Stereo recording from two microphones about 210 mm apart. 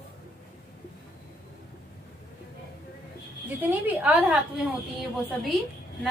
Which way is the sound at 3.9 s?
5° right (ahead or behind).